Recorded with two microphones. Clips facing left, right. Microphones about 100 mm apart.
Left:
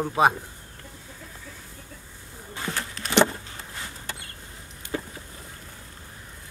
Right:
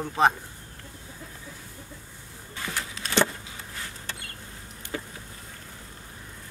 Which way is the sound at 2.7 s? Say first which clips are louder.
Left 1 dB; centre (ahead or behind).